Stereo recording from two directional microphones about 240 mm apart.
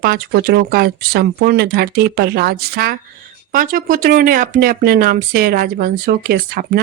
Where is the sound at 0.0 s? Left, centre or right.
Right.